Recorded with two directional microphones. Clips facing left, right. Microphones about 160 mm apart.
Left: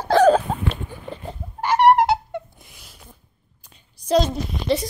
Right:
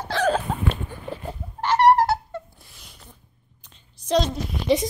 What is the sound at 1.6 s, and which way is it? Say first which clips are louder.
Cat: left 2 dB; 10° left (ahead or behind).